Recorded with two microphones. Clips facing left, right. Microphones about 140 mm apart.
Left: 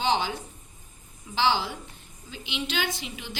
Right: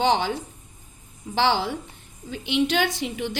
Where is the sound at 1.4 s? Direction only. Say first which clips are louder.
Right 3 dB; 65° right (ahead or behind).